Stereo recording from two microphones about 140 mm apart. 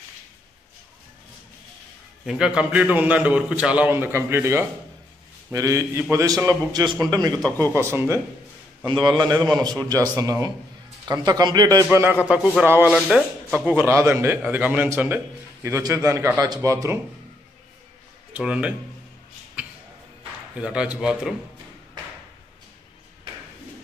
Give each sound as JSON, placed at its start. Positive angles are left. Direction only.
{"t": 2.2, "sound": "a man's voice", "side_deg": -5}
{"t": 8.8, "sound": "a man's voice", "side_deg": -30}
{"t": 18.3, "sound": "speech", "side_deg": -10}
{"t": 19.6, "sound": "a sound", "side_deg": -10}
{"t": 20.5, "sound": "a man's voice", "side_deg": -10}